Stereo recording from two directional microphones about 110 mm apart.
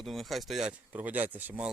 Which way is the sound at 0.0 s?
Centre (ahead or behind).